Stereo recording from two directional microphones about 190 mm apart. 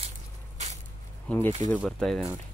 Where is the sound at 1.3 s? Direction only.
10° left (ahead or behind).